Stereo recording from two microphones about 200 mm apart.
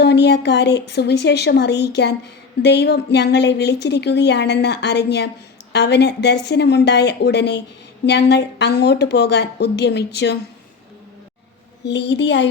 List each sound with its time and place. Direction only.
0.0 s speech: 55° left (ahead or behind)
11.9 s speech: 60° left (ahead or behind)